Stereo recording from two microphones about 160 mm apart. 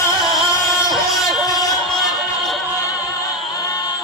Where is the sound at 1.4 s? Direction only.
25° left (ahead or behind).